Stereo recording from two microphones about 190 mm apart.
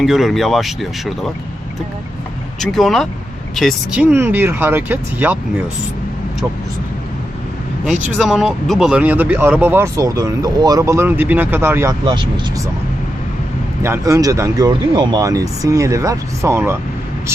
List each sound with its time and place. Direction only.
0.0 s speech: centre (ahead or behind)
2.6 s speech: centre (ahead or behind)
7.9 s speech: 5° right (ahead or behind)
13.8 s speech: 15° right (ahead or behind)